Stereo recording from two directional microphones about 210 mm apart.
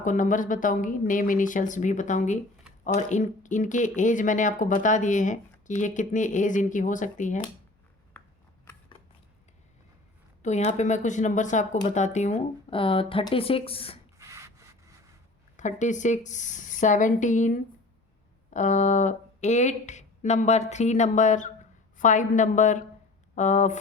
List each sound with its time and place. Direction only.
0.0 s speech: 35° left (ahead or behind)
10.4 s speech: 35° left (ahead or behind)
14.2 s sanding: 15° right (ahead or behind)
15.5 s speech: 35° left (ahead or behind)